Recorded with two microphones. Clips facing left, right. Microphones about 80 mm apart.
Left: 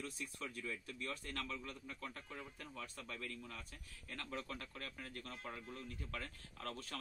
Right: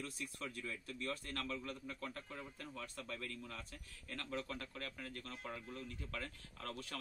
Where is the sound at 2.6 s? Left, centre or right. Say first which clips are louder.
Right 2 dB; centre.